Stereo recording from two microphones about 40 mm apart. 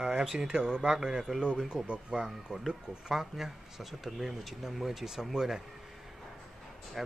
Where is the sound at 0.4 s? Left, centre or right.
Right.